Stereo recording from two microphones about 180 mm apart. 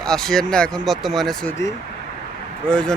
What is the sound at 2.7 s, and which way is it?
Speech, 5° left (ahead or behind).